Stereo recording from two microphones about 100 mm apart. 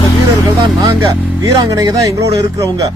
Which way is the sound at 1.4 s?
35° right (ahead or behind).